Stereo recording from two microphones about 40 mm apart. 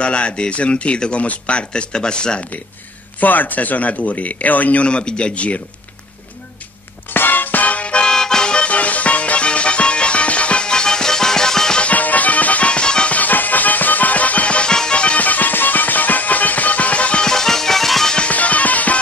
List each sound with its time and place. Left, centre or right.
0.0 s speech: left
3.2 s speech: left
4.8 s speech: left
7.2 s music: left
8.1 s music: centre
8.6 s music: left; by 11.8 s centre
11.8 s music: left
13.1 s music: left
14.7 s music: left
15.1 s music: left
17.2 s music: centre
18.3 s music: left